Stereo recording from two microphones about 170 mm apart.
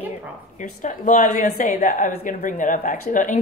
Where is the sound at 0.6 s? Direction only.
45° left (ahead or behind).